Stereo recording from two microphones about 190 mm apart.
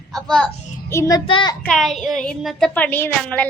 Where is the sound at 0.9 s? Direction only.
15° left (ahead or behind).